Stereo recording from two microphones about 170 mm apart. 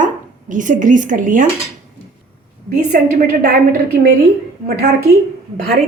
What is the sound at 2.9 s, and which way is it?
A woman's voice, 55° right (ahead or behind).